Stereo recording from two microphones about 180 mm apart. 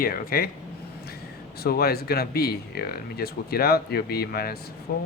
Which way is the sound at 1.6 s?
60° left (ahead or behind).